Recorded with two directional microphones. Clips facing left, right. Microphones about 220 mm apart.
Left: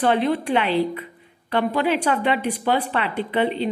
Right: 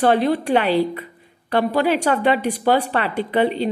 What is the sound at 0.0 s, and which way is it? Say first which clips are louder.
A woman's voice: right 3 dB; 40° right (ahead or behind).